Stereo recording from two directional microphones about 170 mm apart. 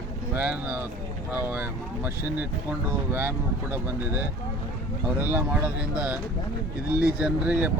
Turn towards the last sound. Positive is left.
turn(degrees=-10)  # may be behind; listen again after turning